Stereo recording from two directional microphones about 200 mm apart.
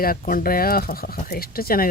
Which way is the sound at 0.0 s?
45° left (ahead or behind).